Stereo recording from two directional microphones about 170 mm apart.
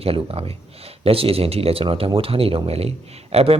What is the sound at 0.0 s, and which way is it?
Speech, 35° right (ahead or behind).